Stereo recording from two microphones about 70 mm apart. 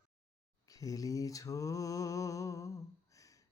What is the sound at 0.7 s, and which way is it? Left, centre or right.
Mantra, left.